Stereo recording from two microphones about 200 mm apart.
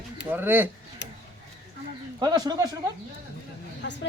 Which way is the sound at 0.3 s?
10° right (ahead or behind).